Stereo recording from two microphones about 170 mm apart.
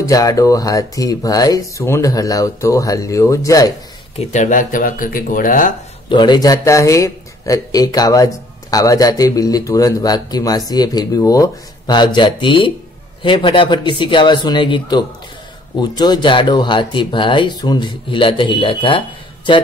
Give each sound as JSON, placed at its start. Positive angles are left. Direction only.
{"t": 0.0, "sound": "a man's voice", "side_deg": 20}
{"t": 4.2, "sound": "speech", "side_deg": 45}
{"t": 6.0, "sound": "a man's voice", "side_deg": 25}